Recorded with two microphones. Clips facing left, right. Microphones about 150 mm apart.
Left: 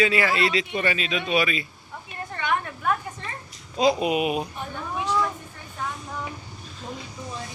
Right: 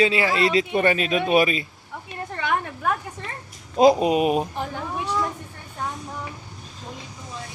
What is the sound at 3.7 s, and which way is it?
Speech, 45° right (ahead or behind).